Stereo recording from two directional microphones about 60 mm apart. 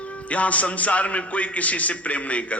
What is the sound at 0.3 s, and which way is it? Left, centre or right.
A man's voice, left.